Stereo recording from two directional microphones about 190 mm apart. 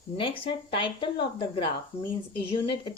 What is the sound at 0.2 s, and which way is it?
Speech, 25° left (ahead or behind).